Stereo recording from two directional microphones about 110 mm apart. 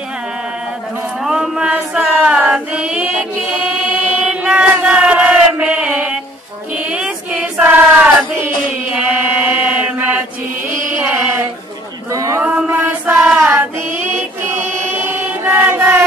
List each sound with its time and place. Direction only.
1.2 s female singing: 5° right (ahead or behind)
6.8 s chant: 10° right (ahead or behind)
8.9 s mantra: 15° right (ahead or behind)
10.7 s carnatic music: 25° right (ahead or behind)
12.1 s a sound: 30° right (ahead or behind)
12.4 s mantra: 15° right (ahead or behind)
13.4 s child singing: 20° right (ahead or behind)
14.9 s chant: 20° right (ahead or behind)